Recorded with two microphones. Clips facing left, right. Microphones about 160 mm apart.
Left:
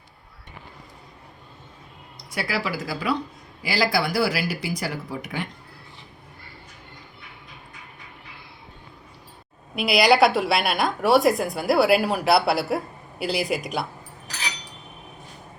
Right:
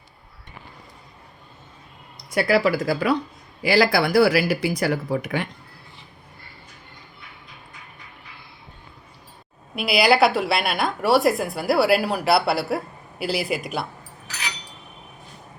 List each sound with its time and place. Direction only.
2.1 s speech: 50° right (ahead or behind)
9.7 s a woman's voice: centre (ahead or behind)